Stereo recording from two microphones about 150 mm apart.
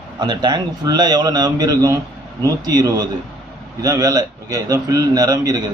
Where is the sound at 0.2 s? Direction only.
30° right (ahead or behind).